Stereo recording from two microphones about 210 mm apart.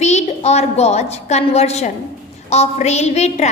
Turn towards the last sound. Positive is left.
turn(degrees=30)  # may be behind; listen again after turning